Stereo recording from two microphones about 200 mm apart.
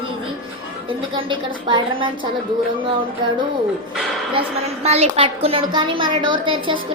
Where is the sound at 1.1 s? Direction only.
25° right (ahead or behind).